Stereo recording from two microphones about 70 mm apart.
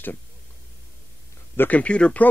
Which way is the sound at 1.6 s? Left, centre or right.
Left.